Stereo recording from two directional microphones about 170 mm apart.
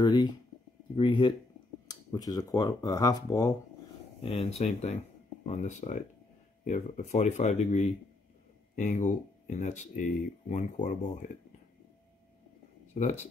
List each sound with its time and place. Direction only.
0.0 s speech: 25° left (ahead or behind)
4.2 s speech: 35° left (ahead or behind)
12.9 s speech: 45° left (ahead or behind)